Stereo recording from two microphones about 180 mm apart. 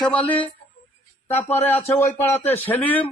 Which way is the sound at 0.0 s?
5° left (ahead or behind).